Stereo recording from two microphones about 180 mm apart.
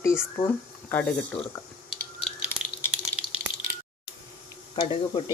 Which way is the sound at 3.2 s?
10° right (ahead or behind).